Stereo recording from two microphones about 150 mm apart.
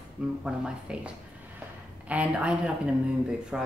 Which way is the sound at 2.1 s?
10° right (ahead or behind).